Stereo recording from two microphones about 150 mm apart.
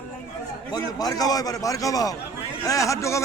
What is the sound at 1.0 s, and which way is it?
A man's voice, 25° left (ahead or behind).